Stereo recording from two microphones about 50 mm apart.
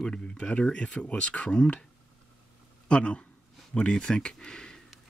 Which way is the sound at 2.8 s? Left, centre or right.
Left.